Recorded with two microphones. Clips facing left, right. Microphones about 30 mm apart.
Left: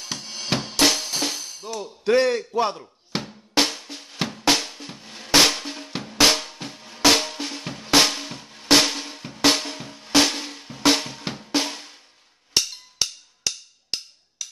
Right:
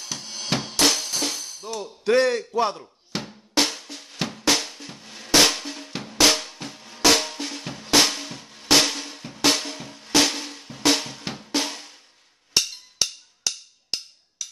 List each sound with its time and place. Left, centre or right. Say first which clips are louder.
0.2 s music: even; centre
1.7 s speech: left 1 dB; centre
3.1 s drum: left 2 dB; left
3.5 s drum: left 1 dB; centre
12.5 s percussion: even; centre